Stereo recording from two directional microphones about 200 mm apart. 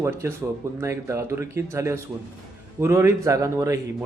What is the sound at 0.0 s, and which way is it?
A man's voice, 15° right (ahead or behind).